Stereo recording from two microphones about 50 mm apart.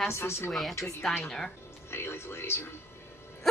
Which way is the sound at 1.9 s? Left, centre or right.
Left.